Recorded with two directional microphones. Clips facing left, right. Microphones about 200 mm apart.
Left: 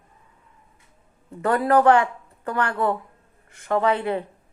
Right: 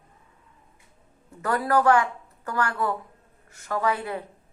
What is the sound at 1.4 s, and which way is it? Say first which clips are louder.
A woman's voice: left 4 dB; 30° left (ahead or behind).